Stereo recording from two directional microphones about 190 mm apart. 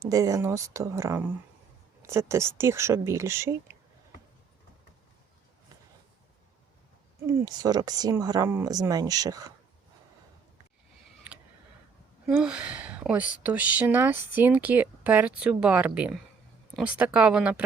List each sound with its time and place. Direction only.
0.0 s speech: 20° right (ahead or behind)
7.3 s speech: 15° right (ahead or behind)
12.2 s speech: 5° right (ahead or behind)